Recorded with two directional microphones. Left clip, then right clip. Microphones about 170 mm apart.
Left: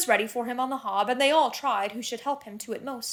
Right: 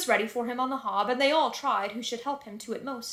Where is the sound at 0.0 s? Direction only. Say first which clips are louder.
Left 2 dB; 20° left (ahead or behind).